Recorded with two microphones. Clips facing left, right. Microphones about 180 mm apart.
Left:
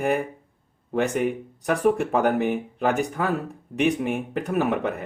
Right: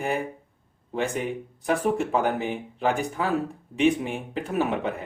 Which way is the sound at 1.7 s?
60° left (ahead or behind).